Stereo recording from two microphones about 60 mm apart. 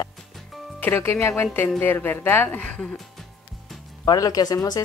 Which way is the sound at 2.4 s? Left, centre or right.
Left.